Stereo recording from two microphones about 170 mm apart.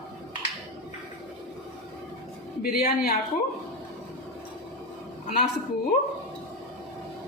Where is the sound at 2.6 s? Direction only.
65° left (ahead or behind).